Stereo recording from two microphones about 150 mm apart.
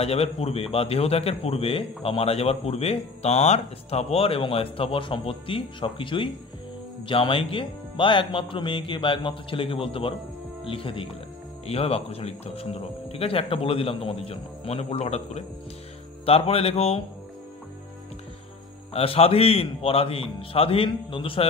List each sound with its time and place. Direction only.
0.0 s a man's voice: 40° left (ahead or behind)
18.9 s a man's voice: 40° left (ahead or behind)